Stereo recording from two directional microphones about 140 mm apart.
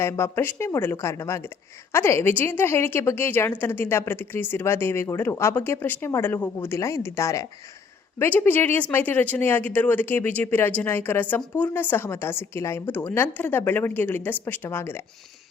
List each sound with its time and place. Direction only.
0.0 s speech: 20° left (ahead or behind)